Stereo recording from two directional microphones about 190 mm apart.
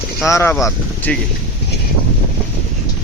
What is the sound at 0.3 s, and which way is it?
Speech, 15° left (ahead or behind).